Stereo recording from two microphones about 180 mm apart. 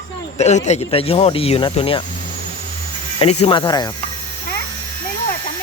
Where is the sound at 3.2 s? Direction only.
35° left (ahead or behind).